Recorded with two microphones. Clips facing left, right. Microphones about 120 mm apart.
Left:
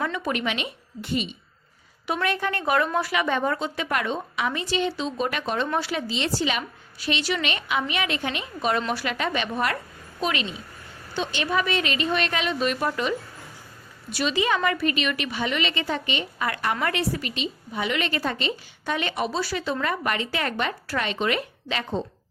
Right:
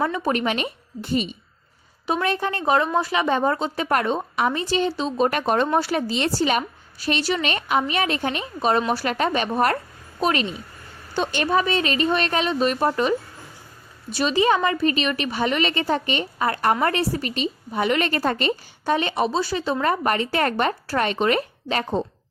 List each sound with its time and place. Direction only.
0.0 s a woman's voice: 35° right (ahead or behind)
2.0 s a woman's voice: 30° right (ahead or behind); by 11.4 s 50° right (ahead or behind)
11.5 s a woman's voice: 35° right (ahead or behind)
14.3 s a woman's voice: 35° right (ahead or behind)
18.9 s speech: 35° right (ahead or behind)
19.8 s speech: 40° right (ahead or behind)